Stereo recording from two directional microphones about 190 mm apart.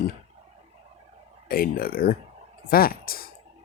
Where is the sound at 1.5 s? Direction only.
50° left (ahead or behind).